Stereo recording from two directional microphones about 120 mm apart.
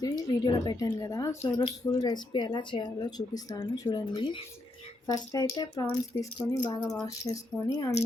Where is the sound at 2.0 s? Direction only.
40° left (ahead or behind).